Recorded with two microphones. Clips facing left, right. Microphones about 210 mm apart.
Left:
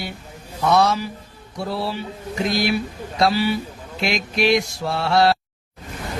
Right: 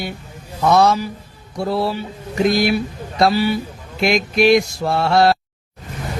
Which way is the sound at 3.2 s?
50° right (ahead or behind).